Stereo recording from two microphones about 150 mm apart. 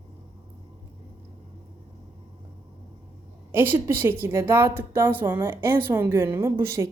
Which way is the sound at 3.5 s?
15° right (ahead or behind).